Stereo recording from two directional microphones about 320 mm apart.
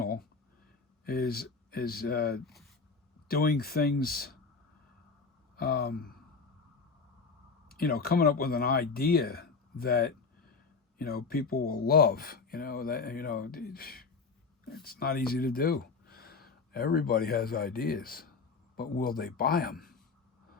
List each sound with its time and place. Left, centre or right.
0.0 s a sound: left
1.0 s speech: left
5.5 s speech: left
7.7 s speech: left